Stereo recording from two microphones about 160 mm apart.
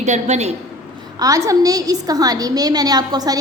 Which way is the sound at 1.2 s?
20° right (ahead or behind).